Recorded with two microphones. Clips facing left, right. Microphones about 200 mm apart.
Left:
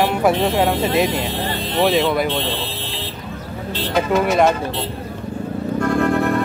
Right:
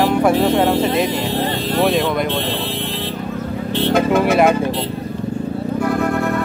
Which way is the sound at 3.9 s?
55° right (ahead or behind).